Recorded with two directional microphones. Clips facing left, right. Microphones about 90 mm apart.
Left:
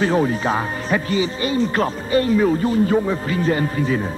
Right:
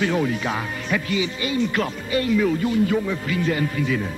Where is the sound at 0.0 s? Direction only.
35° left (ahead or behind).